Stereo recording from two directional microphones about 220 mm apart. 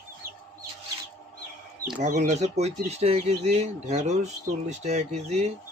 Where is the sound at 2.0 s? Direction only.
35° right (ahead or behind).